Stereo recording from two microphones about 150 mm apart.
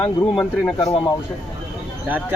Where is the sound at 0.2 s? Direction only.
20° left (ahead or behind).